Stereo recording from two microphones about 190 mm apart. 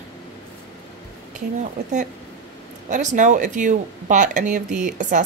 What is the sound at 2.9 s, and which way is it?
Speech, 40° right (ahead or behind).